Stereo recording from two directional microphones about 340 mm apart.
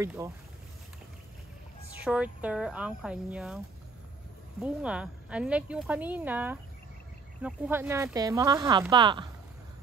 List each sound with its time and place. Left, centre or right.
0.0 s speech: centre
2.0 s speech: centre